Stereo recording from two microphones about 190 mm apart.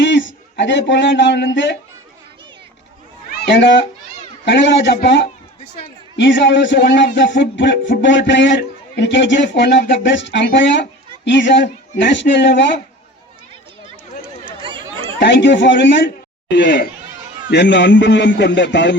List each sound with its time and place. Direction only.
0.0 s speech: 70° left (ahead or behind)
3.6 s a man's voice: 70° left (ahead or behind)
14.6 s chatter: 25° right (ahead or behind)
15.2 s a man's voice: 65° left (ahead or behind)
16.6 s speech: 55° left (ahead or behind)
17.5 s a man's voice: 70° left (ahead or behind)